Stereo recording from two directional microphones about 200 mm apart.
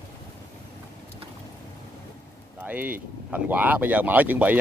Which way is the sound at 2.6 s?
10° right (ahead or behind).